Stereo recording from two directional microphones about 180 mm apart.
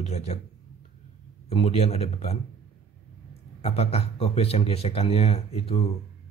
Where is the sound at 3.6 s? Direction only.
35° left (ahead or behind).